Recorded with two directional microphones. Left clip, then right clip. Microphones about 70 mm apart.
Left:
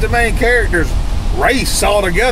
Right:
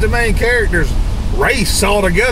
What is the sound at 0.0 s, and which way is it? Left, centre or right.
Speech, centre.